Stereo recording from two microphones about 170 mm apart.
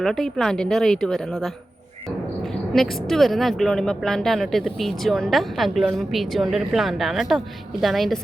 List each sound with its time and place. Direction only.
0.0 s a woman's voice: centre (ahead or behind)
2.7 s a woman's voice: centre (ahead or behind)